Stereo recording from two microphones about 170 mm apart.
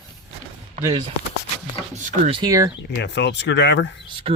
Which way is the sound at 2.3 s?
30° right (ahead or behind).